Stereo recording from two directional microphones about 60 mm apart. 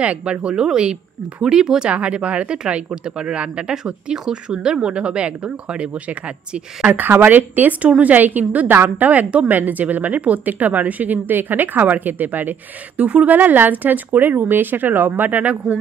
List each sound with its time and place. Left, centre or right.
0.0 s speech: centre
6.9 s speech: right